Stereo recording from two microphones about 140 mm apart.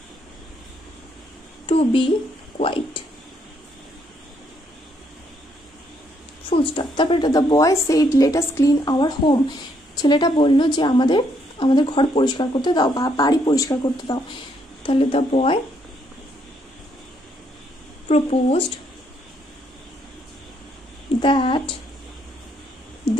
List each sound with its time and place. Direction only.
1.7 s a sound: 40° left (ahead or behind)
2.5 s speech: 40° left (ahead or behind)
6.5 s a woman's voice: 40° left (ahead or behind)
14.9 s a woman's voice: 40° left (ahead or behind)
18.0 s speech: 50° left (ahead or behind)
21.2 s a woman's voice: 35° left (ahead or behind)